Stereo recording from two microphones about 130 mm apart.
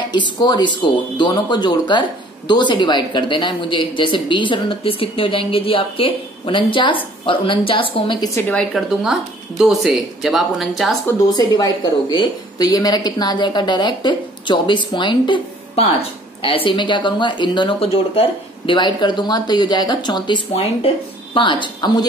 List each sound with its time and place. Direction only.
0.1 s speech: 35° left (ahead or behind)
8.4 s a woman's voice: 10° left (ahead or behind)
8.7 s speech: 5° right (ahead or behind)
11.2 s speech: 30° left (ahead or behind)